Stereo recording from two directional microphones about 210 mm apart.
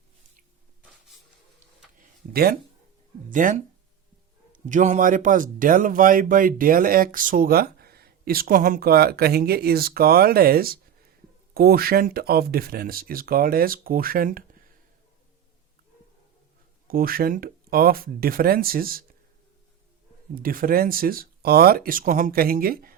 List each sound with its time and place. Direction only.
2.0 s a sound: 45° right (ahead or behind)
3.2 s speech: 40° right (ahead or behind)
16.9 s speech: 45° right (ahead or behind)
20.3 s speech: 40° right (ahead or behind)